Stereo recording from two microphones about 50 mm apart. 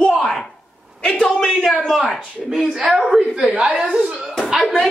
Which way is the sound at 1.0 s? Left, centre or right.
Left.